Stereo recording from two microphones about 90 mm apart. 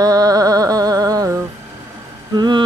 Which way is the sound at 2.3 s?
50° right (ahead or behind).